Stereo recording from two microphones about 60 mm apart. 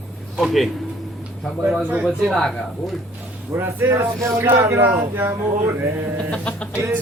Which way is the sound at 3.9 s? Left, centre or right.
Right.